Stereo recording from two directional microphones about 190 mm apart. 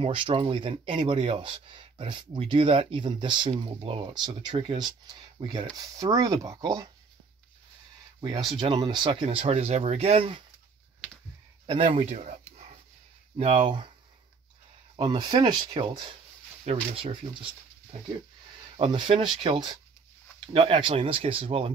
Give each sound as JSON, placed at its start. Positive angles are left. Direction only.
{"t": 0.0, "sound": "speech", "side_deg": -25}
{"t": 8.2, "sound": "speech", "side_deg": -25}
{"t": 11.6, "sound": "speech", "side_deg": -30}
{"t": 15.0, "sound": "speech", "side_deg": -25}
{"t": 18.8, "sound": "speech", "side_deg": -25}